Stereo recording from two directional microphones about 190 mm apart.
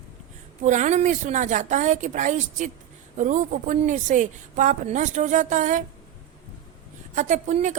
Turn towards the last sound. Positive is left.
turn(degrees=-40)  # may be behind; listen again after turning